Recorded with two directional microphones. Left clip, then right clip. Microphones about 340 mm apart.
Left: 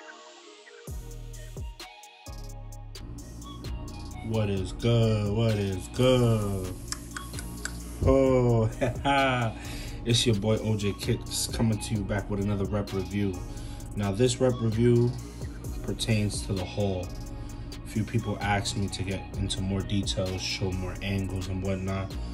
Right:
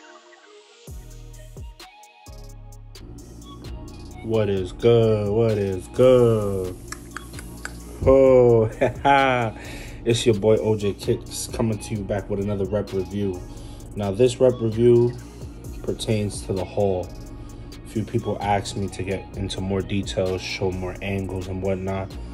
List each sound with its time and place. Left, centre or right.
3.4 s music: centre
4.7 s speech: centre
16.2 s speech: centre
16.7 s speech: centre